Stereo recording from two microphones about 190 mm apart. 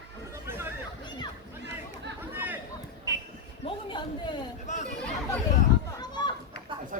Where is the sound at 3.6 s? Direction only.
25° left (ahead or behind).